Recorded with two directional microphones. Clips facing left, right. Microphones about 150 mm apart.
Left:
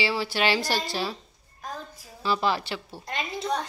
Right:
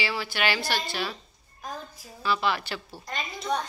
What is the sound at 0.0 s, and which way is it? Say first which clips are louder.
Speech: left 3 dB; 30° left (ahead or behind).